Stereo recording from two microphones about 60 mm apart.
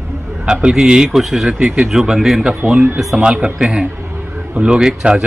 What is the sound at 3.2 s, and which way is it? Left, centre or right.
Speech, centre.